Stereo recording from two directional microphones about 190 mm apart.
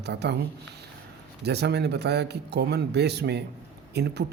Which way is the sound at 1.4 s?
60° right (ahead or behind).